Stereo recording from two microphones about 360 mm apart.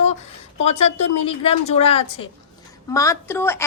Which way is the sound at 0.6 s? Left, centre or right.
Centre.